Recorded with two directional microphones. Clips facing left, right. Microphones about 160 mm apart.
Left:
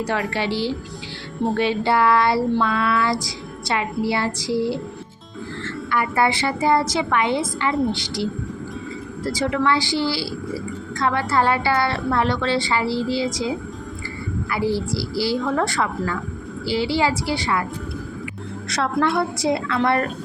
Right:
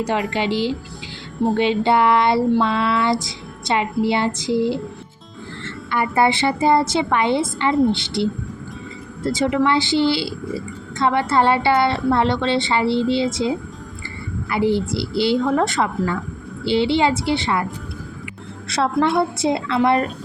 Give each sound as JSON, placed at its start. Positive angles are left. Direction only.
{"t": 0.0, "sound": "a woman's voice", "side_deg": -20}
{"t": 5.9, "sound": "a woman's voice", "side_deg": -25}
{"t": 9.3, "sound": "a woman's voice", "side_deg": -20}
{"t": 14.5, "sound": "a woman's voice", "side_deg": -20}
{"t": 18.7, "sound": "a woman's voice", "side_deg": -25}